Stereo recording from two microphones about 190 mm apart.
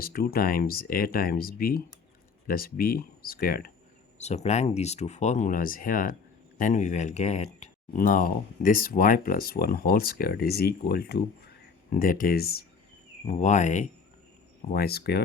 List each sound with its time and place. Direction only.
0.0 s speech: 50° left (ahead or behind)
4.2 s speech: 35° left (ahead or behind); by 12.6 s 55° left (ahead or behind)
13.2 s speech: 40° left (ahead or behind)
14.7 s speech: 55° left (ahead or behind)